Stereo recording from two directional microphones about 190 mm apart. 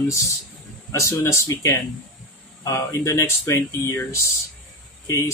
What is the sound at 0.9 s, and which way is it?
Speech, 15° left (ahead or behind).